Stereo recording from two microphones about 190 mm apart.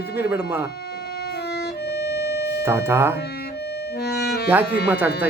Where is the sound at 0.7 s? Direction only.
60° left (ahead or behind).